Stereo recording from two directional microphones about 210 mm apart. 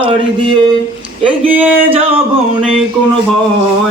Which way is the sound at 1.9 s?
25° right (ahead or behind).